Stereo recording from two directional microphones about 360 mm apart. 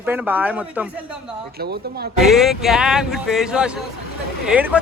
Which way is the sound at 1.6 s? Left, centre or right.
Right.